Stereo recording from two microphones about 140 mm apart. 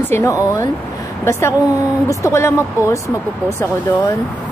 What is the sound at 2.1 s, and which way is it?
Speech, 20° left (ahead or behind).